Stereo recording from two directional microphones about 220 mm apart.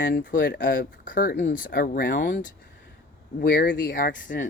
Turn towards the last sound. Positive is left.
turn(degrees=40)  # may be behind; listen again after turning